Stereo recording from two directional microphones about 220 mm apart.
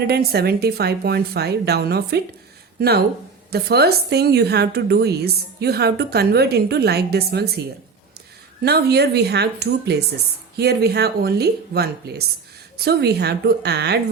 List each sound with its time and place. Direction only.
0.1 s a woman's voice: 45° right (ahead or behind)
3.5 s a woman's voice: 45° right (ahead or behind)
8.6 s a woman's voice: 50° right (ahead or behind)